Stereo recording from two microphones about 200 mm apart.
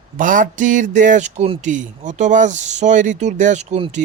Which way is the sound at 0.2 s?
40° right (ahead or behind).